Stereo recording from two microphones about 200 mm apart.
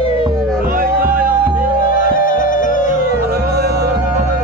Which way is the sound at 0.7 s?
45° right (ahead or behind).